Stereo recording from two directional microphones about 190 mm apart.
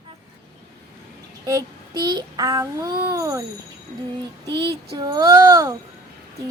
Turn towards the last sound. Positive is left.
turn(degrees=-20)  # may be behind; listen again after turning